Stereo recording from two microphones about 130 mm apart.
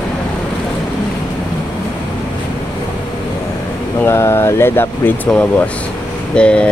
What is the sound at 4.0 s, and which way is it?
Speech, 20° left (ahead or behind).